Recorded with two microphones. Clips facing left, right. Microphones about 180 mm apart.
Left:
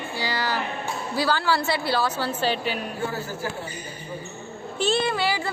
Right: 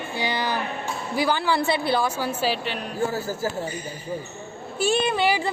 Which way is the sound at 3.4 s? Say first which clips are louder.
Right 5 dB; 40° right (ahead or behind).